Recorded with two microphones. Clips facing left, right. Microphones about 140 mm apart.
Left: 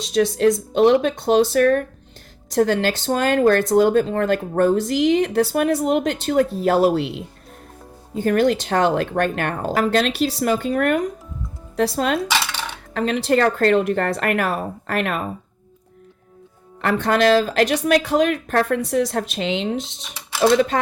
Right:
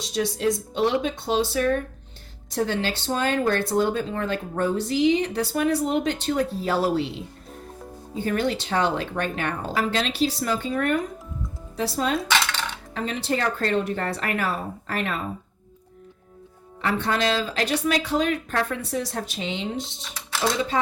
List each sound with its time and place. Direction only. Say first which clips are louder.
0.1 s speech: left 7 dB; 80° left
3.7 s speech: left 6 dB; 45° left (ahead or behind)
4.6 s speech: left 3 dB; 70° left (ahead or behind)
5.4 s speech: left 5 dB; 50° left (ahead or behind)
6.8 s speech: left 6 dB; 65° left (ahead or behind)
8.1 s speech: left 7 dB; 55° left (ahead or behind)
11.8 s speech: left 5 dB; 75° left (ahead or behind)
12.3 s music: left 1 dB; 5° left (ahead or behind)
12.9 s speech: left 8 dB; 75° left (ahead or behind)
16.8 s speech: left 6 dB; 60° left (ahead or behind)
18.9 s speech: left 8 dB; 80° left